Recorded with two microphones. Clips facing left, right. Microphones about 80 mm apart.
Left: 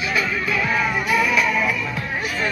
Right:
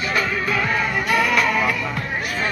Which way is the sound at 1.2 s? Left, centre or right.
Right.